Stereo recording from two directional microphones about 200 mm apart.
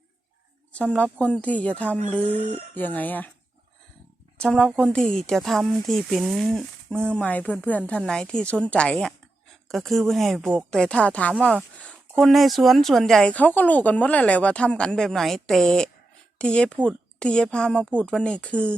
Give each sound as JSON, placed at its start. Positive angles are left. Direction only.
{"t": 0.9, "sound": "speech", "side_deg": 5}
{"t": 2.7, "sound": "speech", "side_deg": 10}
{"t": 4.4, "sound": "speech", "side_deg": 5}